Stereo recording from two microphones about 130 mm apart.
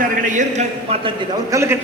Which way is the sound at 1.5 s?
20° right (ahead or behind).